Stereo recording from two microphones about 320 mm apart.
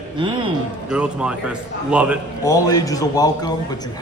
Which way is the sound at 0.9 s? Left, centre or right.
Centre.